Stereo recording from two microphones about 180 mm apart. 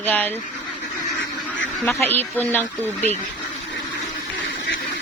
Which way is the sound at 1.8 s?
10° left (ahead or behind).